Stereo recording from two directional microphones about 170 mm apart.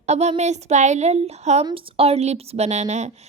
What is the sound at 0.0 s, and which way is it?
Speech, 40° right (ahead or behind).